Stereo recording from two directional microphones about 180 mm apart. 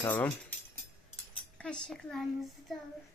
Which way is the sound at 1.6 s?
5° left (ahead or behind).